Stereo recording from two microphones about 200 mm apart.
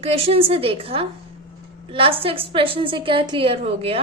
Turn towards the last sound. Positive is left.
turn(degrees=-30)  # may be behind; listen again after turning